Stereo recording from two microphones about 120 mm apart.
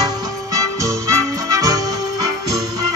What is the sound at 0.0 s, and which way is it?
Music, 30° right (ahead or behind).